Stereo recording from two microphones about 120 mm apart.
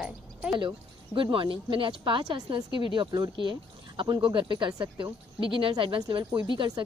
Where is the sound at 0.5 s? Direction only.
40° right (ahead or behind).